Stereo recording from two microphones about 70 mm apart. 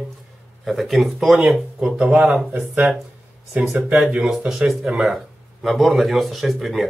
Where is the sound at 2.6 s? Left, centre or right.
Right.